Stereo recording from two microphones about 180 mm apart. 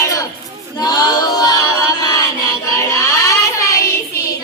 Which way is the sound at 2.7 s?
15° left (ahead or behind).